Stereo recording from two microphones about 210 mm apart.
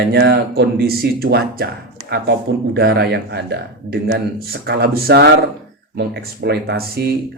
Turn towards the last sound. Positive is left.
turn(degrees=-45)  # may be behind; listen again after turning